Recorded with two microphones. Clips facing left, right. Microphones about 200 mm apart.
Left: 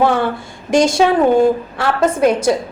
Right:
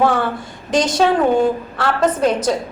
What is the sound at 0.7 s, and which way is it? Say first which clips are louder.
A woman's voice: left 3 dB; 10° left (ahead or behind).